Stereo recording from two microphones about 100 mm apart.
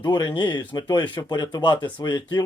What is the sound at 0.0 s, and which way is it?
A man's voice, 45° left (ahead or behind).